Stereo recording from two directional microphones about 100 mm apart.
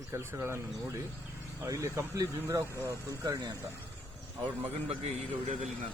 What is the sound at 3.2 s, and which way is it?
Speech, 45° right (ahead or behind).